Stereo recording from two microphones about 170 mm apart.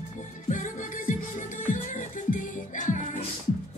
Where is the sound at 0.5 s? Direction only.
50° left (ahead or behind).